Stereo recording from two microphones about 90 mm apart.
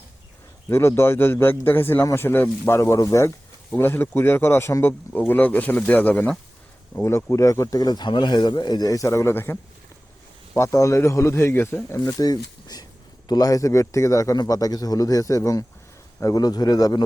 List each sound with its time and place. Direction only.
0.7 s speech: 30° left (ahead or behind)
3.8 s speech: 25° left (ahead or behind)
7.0 s a man's voice: 30° left (ahead or behind)